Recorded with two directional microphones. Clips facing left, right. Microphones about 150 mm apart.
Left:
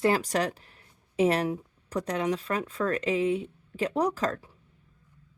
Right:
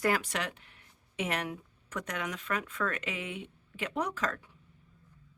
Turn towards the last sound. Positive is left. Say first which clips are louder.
# left 7 dB
turn(degrees=35)  # may be behind; listen again after turning